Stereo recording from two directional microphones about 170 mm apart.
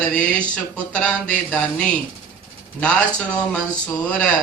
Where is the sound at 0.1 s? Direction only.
5° left (ahead or behind).